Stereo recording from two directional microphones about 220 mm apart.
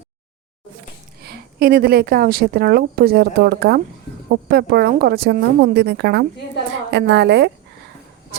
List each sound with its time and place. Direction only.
1.2 s a woman's voice: 45° right (ahead or behind)